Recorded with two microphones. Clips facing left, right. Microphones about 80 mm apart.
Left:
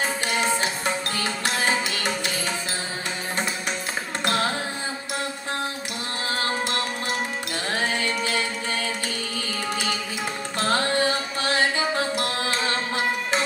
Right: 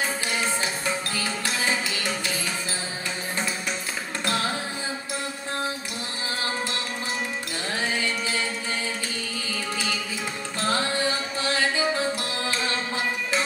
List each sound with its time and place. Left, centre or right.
0.4 s music: left
4.2 s music: left
10.6 s music: left